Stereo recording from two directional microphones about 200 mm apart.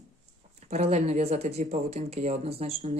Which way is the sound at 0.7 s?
35° right (ahead or behind).